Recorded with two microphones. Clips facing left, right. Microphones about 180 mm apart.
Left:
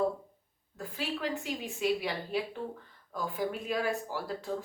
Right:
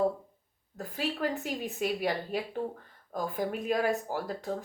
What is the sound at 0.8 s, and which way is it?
Speech, 45° right (ahead or behind).